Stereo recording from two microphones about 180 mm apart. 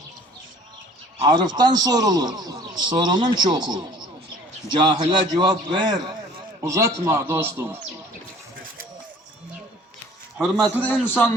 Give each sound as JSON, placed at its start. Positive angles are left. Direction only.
{"t": 1.2, "sound": "a man's voice", "side_deg": -25}
{"t": 10.3, "sound": "a man's voice", "side_deg": -5}
{"t": 11.0, "sound": "a man's voice", "side_deg": 10}